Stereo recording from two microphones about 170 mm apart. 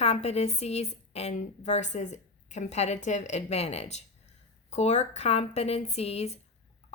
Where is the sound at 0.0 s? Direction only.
40° left (ahead or behind).